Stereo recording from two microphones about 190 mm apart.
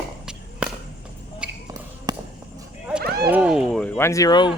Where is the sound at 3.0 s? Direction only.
55° right (ahead or behind).